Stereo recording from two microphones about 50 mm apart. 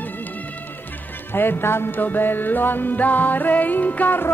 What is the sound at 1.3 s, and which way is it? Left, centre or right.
Speech, left.